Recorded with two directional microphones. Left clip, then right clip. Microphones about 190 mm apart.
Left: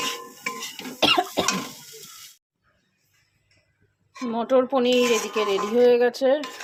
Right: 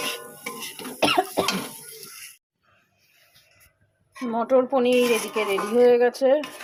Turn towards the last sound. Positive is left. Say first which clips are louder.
# right 1 dB
turn(degrees=0)  # may be behind; listen again after turning